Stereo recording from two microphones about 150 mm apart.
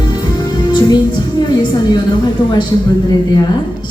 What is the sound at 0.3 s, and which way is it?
A woman's voice, 30° left (ahead or behind).